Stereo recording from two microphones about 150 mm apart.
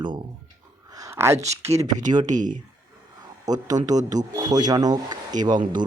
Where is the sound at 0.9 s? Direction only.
20° right (ahead or behind).